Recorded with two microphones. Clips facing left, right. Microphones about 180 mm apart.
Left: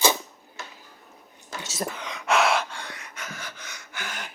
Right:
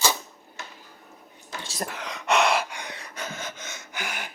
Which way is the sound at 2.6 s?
15° right (ahead or behind).